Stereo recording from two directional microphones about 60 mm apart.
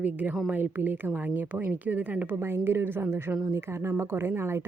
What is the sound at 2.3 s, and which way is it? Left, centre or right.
A woman's voice, right.